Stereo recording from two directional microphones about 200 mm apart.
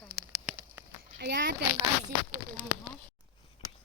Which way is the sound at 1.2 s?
60° right (ahead or behind).